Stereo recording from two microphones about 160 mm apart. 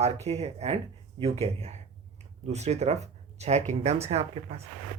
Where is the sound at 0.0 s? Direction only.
40° right (ahead or behind).